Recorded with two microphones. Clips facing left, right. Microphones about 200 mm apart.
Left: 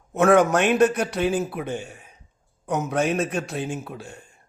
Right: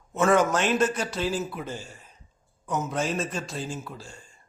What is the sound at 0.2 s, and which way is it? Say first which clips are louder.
A man's voice: left 5 dB; 60° left (ahead or behind).